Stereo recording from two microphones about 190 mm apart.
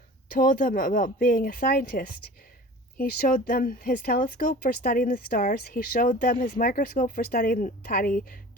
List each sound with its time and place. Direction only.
0.3 s speech: 45° left (ahead or behind)